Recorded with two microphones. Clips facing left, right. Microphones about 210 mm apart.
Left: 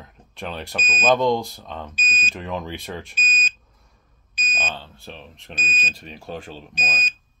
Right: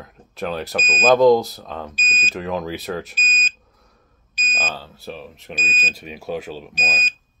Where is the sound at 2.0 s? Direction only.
35° right (ahead or behind).